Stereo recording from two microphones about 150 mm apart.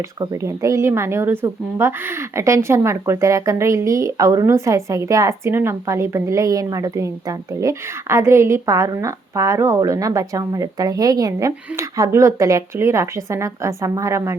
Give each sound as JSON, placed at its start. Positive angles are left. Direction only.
{"t": 0.2, "sound": "a woman's voice", "side_deg": -20}